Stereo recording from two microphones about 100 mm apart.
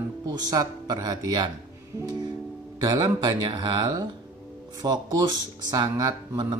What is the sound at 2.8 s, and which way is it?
Speech, 40° right (ahead or behind).